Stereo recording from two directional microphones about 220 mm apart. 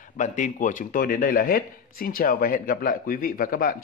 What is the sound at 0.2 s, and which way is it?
Speech, 35° left (ahead or behind).